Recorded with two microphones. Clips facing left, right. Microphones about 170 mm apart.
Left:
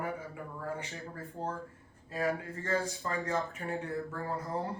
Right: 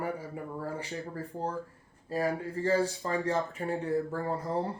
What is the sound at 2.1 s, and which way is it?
Speech, 35° right (ahead or behind).